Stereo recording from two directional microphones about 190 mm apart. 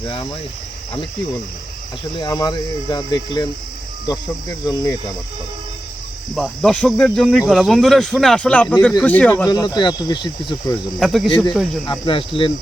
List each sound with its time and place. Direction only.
0.0 s speech: 25° left (ahead or behind)
2.1 s speech: 20° left (ahead or behind)
6.3 s speech: centre (ahead or behind); by 10.8 s 25° left (ahead or behind)
11.0 s speech: centre (ahead or behind)
11.3 s speech: 25° left (ahead or behind)